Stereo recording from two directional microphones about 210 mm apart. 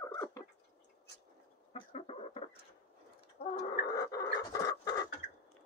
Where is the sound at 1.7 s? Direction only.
30° left (ahead or behind).